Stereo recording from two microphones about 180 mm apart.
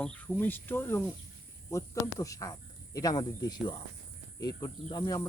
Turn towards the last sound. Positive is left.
turn(degrees=25)  # may be behind; listen again after turning